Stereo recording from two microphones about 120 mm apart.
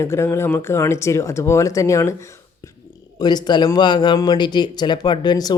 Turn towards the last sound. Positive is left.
turn(degrees=35)  # may be behind; listen again after turning